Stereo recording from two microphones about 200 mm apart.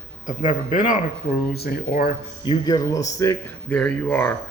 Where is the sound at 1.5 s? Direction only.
50° left (ahead or behind).